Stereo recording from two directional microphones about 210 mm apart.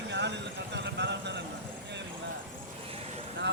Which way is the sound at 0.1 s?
55° right (ahead or behind).